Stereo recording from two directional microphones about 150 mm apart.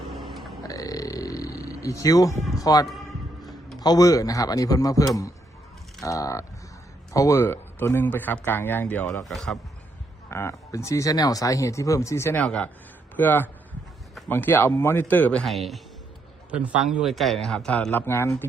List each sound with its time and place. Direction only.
0.7 s a sound: 25° left (ahead or behind)
2.6 s speech: 25° left (ahead or behind); by 9.6 s centre (ahead or behind)
10.2 s speech: 15° left (ahead or behind)